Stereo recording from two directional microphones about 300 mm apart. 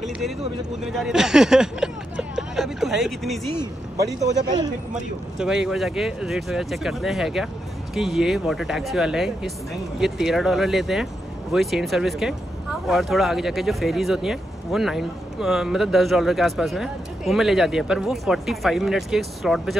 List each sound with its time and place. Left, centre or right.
0.8 s speech: centre
4.2 s speech: centre
5.7 s speech: centre